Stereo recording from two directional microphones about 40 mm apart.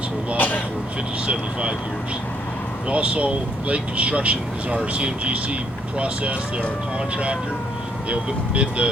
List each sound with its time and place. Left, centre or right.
0.3 s speech: left
2.9 s speech: right
8.1 s speech: right